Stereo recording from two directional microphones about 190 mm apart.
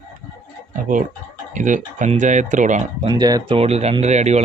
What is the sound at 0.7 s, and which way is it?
Speech, 45° right (ahead or behind).